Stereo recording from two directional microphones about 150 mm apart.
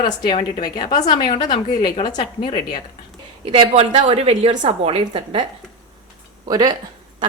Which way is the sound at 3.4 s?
40° right (ahead or behind).